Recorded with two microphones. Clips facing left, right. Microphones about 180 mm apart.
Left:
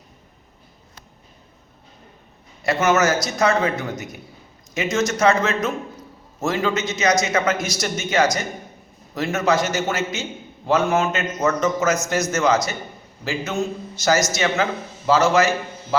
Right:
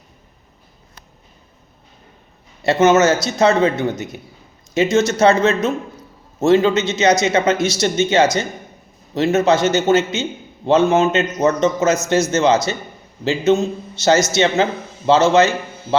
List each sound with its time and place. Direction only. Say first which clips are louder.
2.6 s a man's voice: right 6 dB; 25° right (ahead or behind)